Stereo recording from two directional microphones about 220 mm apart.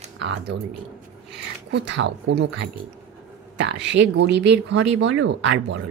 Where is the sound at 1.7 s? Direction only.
55° right (ahead or behind).